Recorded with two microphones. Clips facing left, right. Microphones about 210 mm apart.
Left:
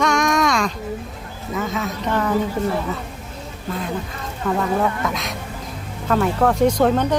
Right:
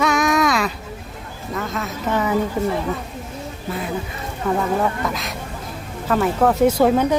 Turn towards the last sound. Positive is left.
turn(degrees=-10)  # may be behind; listen again after turning